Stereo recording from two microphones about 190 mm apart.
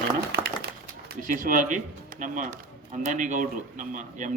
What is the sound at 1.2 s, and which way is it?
A man's voice, 45° right (ahead or behind).